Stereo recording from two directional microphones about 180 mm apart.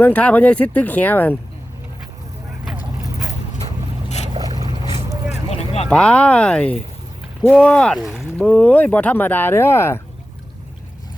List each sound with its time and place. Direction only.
0.0 s speech: 10° left (ahead or behind)
4.4 s boat: 20° right (ahead or behind)
5.3 s vehicle: 35° left (ahead or behind)
5.9 s speech: 5° left (ahead or behind)